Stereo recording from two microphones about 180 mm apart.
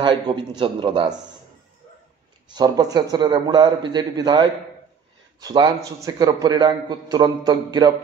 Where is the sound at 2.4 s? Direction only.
20° right (ahead or behind).